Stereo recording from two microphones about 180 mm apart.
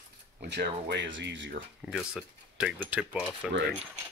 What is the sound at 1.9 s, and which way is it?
Speech, 5° right (ahead or behind).